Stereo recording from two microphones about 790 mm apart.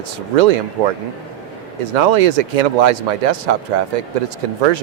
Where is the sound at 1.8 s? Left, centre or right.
Right.